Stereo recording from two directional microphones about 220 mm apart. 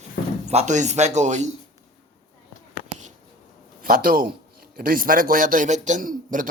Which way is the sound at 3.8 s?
40° right (ahead or behind).